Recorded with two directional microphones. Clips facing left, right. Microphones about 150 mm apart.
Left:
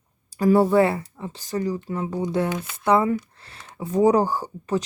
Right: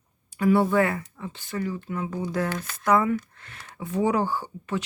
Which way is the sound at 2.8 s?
30° left (ahead or behind).